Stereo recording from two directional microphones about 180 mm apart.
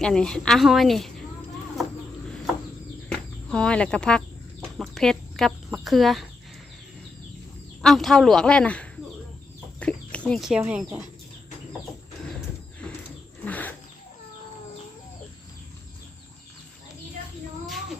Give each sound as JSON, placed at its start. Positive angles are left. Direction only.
{"t": 0.0, "sound": "a woman's voice", "side_deg": 5}
{"t": 3.1, "sound": "a sound", "side_deg": 5}
{"t": 4.8, "sound": "speech", "side_deg": 0}
{"t": 7.8, "sound": "a woman's voice", "side_deg": 0}
{"t": 9.8, "sound": "chicken", "side_deg": 5}
{"t": 10.6, "sound": "speech", "side_deg": -10}
{"t": 12.8, "sound": "a sound", "side_deg": 5}